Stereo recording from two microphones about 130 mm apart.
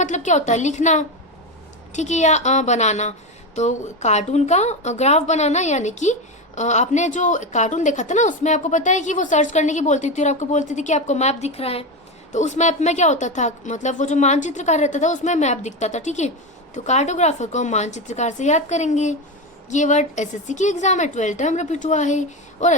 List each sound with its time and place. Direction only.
0.0 s a woman's voice: 70° left (ahead or behind); by 11.9 s 50° left (ahead or behind)
12.3 s a woman's voice: 65° left (ahead or behind)